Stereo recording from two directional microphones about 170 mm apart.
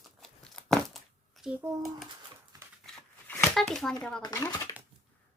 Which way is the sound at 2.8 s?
10° left (ahead or behind).